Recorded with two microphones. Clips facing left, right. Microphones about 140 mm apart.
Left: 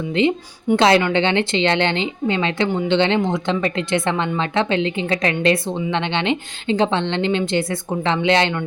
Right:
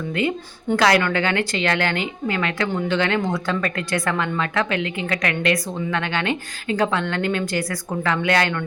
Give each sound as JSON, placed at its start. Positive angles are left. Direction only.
{"t": 0.2, "sound": "a woman's voice", "side_deg": 25}